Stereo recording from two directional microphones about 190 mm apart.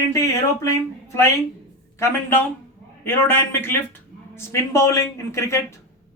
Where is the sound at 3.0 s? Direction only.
10° left (ahead or behind).